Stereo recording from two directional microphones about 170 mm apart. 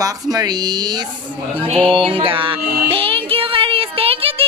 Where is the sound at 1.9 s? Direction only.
30° right (ahead or behind).